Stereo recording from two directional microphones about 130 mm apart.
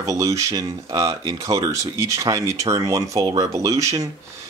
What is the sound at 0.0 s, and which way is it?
Speech, 25° right (ahead or behind).